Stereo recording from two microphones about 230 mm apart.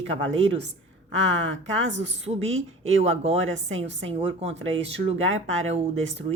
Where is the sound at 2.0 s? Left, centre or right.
Right.